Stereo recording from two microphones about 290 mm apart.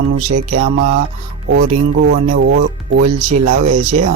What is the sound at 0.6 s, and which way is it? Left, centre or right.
Speech, right.